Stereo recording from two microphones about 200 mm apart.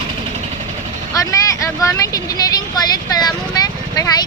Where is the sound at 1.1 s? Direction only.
15° left (ahead or behind).